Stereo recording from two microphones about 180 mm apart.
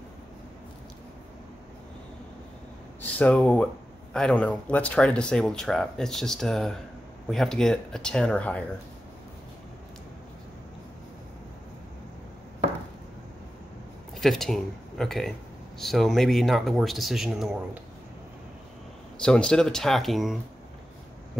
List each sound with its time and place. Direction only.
3.0 s speech: 10° left (ahead or behind)
14.2 s speech: centre (ahead or behind)
19.1 s speech: 5° left (ahead or behind)